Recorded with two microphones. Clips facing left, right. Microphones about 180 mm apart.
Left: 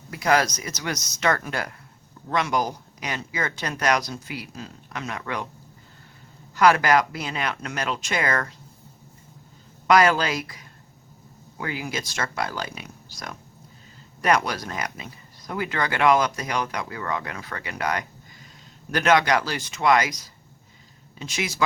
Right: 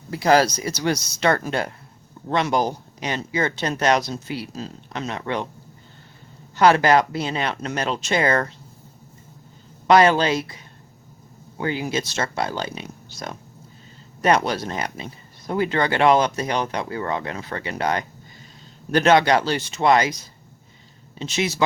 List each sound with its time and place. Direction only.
0.1 s speech: 30° right (ahead or behind)
6.6 s speech: 25° right (ahead or behind)
9.8 s speech: 25° right (ahead or behind)